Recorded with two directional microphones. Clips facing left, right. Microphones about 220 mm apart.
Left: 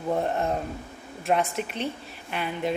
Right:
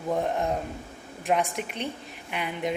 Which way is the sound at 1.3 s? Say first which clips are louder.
Left 1 dB; 15° right (ahead or behind).